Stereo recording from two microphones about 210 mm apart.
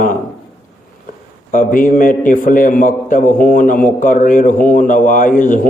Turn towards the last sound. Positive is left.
turn(degrees=40)  # may be behind; listen again after turning